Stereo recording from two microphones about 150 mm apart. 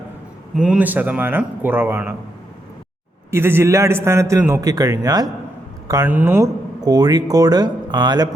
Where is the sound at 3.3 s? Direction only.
15° right (ahead or behind).